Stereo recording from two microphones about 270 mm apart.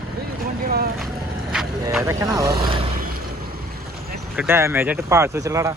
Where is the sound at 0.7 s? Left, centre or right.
Right.